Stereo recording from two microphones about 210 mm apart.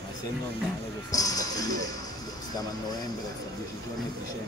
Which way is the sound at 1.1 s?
15° left (ahead or behind).